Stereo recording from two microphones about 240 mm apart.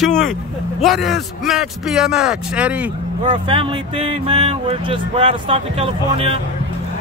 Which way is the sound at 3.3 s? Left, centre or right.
Right.